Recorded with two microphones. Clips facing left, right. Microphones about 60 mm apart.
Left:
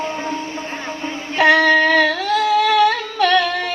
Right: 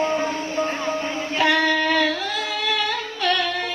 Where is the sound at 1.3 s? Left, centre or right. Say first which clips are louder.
Left 7 dB; left.